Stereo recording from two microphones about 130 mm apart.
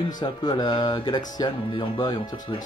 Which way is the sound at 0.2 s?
35° left (ahead or behind).